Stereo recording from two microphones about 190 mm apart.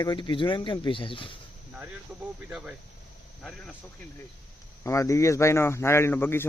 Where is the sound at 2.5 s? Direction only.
5° right (ahead or behind).